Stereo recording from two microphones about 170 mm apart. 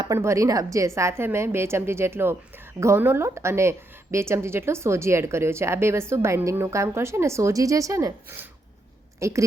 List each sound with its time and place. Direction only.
0.0 s a woman's voice: 20° right (ahead or behind)